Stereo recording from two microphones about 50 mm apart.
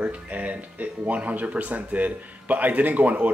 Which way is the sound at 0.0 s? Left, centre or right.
Right.